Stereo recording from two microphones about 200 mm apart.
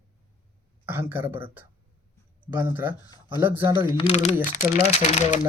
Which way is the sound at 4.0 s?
30° left (ahead or behind).